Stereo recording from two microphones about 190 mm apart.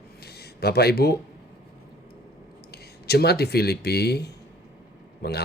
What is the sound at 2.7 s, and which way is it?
Speech, 55° left (ahead or behind).